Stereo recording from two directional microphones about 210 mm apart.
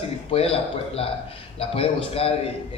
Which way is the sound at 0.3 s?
25° left (ahead or behind).